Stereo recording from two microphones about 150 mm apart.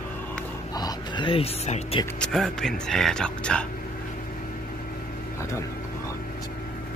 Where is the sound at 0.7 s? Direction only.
30° left (ahead or behind).